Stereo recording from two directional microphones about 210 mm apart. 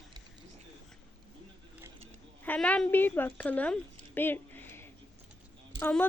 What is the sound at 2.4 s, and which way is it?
A woman's voice, 10° left (ahead or behind).